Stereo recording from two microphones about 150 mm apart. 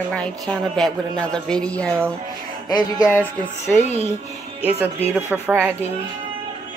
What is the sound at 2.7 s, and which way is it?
Music, 25° left (ahead or behind).